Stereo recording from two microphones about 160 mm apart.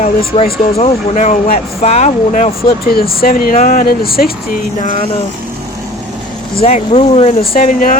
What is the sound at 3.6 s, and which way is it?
Speech, 55° left (ahead or behind).